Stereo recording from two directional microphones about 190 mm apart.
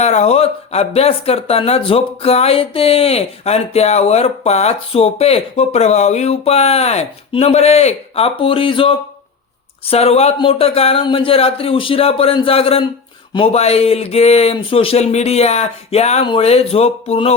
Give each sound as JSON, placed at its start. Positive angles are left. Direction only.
{"t": 0.0, "sound": "speech", "side_deg": 35}